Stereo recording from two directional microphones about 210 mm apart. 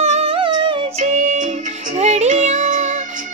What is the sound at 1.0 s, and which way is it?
Music, 35° right (ahead or behind).